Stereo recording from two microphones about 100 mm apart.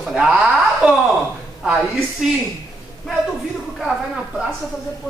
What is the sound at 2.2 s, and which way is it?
Speech, 5° right (ahead or behind).